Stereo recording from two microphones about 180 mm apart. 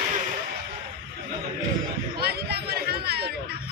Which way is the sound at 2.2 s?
60° right (ahead or behind).